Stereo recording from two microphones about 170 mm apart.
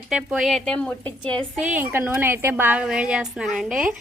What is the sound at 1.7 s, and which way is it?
A woman's voice, 10° right (ahead or behind).